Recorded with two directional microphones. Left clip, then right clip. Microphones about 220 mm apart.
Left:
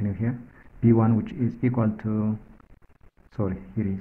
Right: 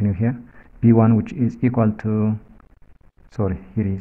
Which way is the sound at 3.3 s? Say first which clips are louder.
Right 5 dB; 35° right (ahead or behind).